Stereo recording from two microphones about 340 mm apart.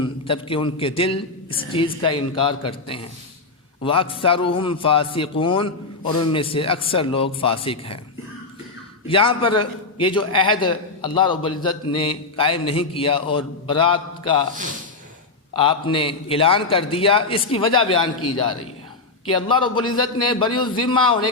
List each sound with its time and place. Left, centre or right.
0.0 s a man's voice: centre
9.0 s a man's voice: centre
15.5 s a man's voice: centre
19.3 s a man's voice: centre